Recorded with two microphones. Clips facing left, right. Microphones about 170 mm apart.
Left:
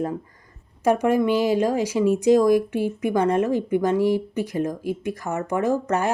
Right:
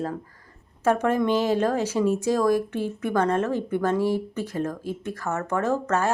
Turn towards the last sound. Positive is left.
turn(degrees=15)  # may be behind; listen again after turning